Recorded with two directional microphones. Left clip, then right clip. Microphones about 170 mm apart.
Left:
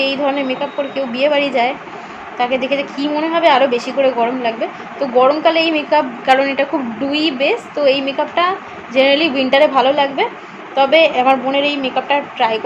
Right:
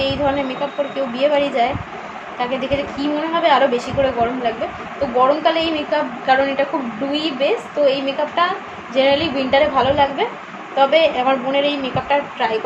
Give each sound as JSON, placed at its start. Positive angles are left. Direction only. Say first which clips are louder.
{"t": 0.0, "sound": "a woman's voice", "louder": "left 2 dB", "side_deg": 60}